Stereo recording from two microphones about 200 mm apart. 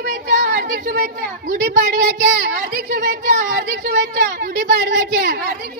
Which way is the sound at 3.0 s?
45° right (ahead or behind).